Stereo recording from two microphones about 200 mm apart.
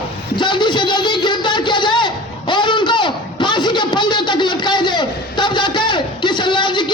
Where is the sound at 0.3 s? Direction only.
25° left (ahead or behind).